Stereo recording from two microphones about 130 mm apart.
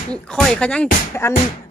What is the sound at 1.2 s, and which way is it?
Speech, 20° left (ahead or behind).